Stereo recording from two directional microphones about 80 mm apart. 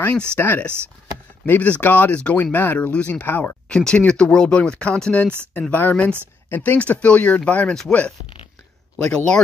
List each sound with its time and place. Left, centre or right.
0.4 s speech: left
3.6 s speech: centre
8.9 s speech: centre